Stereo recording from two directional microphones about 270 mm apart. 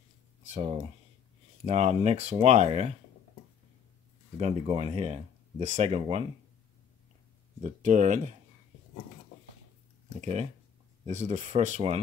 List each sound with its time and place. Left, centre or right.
1.7 s speech: right
4.4 s speech: right
7.6 s speech: right
10.2 s speech: right